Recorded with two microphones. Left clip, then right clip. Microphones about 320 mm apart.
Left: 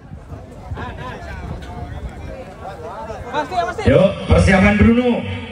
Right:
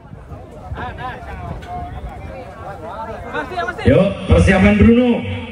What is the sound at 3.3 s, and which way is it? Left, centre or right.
Speech, centre.